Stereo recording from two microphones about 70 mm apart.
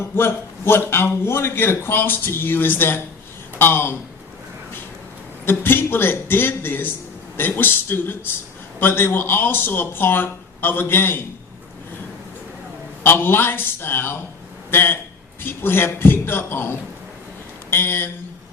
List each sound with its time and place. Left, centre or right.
0.2 s a man's voice: left
5.5 s a man's voice: left
13.0 s a man's voice: left